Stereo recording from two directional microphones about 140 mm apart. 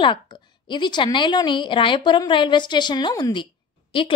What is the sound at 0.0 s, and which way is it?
A woman's voice, 35° left (ahead or behind).